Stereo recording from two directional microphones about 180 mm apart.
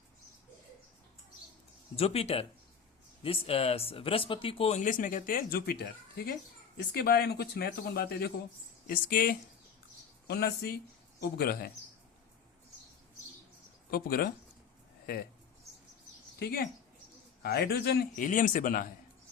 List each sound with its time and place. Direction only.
2.0 s speech: 35° left (ahead or behind)
4.8 s speech: 45° left (ahead or behind)
10.2 s speech: 65° left (ahead or behind)
13.9 s speech: 55° left (ahead or behind)
16.4 s speech: 60° left (ahead or behind)